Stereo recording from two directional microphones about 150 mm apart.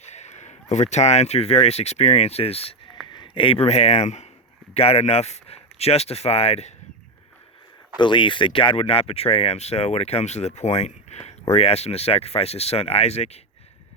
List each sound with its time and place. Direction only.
0.0 s speech: 50° left (ahead or behind)
7.9 s speech: 30° left (ahead or behind)